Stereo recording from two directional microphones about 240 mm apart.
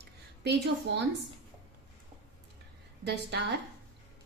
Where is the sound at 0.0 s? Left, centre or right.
Right.